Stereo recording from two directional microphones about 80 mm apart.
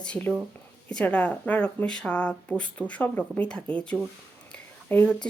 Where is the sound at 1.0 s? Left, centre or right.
Centre.